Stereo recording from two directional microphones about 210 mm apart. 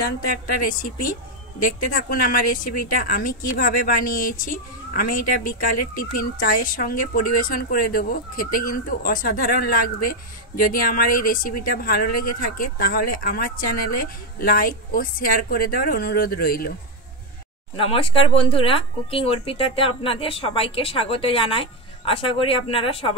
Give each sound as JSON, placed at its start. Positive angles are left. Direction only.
{"t": 0.3, "sound": "speech", "side_deg": 40}
{"t": 17.7, "sound": "speech", "side_deg": 25}